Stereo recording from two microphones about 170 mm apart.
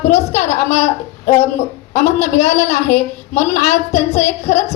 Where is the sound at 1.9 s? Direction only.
40° left (ahead or behind).